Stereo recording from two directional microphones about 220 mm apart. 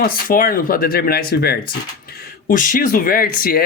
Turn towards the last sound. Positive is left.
turn(degrees=40)  # may be behind; listen again after turning